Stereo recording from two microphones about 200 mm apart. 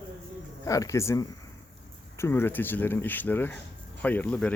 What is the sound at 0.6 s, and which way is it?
Speech, 15° left (ahead or behind).